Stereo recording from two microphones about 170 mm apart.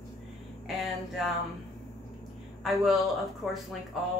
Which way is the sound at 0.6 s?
Centre (ahead or behind).